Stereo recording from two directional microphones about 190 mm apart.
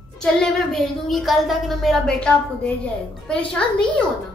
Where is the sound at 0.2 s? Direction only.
5° left (ahead or behind).